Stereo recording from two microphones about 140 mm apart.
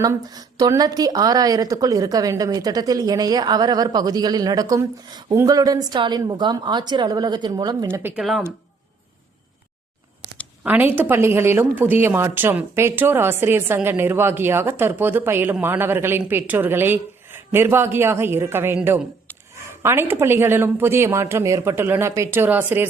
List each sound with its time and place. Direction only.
0.0 s a woman's voice: 25° right (ahead or behind)
7.9 s speech: 15° right (ahead or behind)
8.2 s speech: centre (ahead or behind)
10.6 s speech: 10° right (ahead or behind)